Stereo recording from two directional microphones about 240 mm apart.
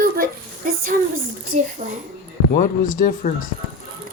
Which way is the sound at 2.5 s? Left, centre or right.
Left.